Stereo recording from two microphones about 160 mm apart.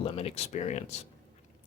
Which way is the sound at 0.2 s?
40° left (ahead or behind).